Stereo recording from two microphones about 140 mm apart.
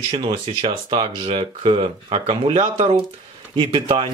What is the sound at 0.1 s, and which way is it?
Speech, 40° right (ahead or behind).